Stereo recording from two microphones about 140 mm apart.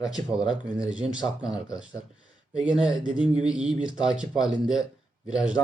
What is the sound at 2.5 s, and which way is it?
Speech, 5° right (ahead or behind).